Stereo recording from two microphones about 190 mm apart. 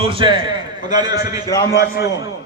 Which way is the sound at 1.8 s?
55° left (ahead or behind).